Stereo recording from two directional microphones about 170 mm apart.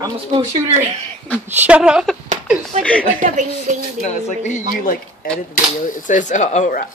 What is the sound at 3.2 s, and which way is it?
Speech, 50° right (ahead or behind).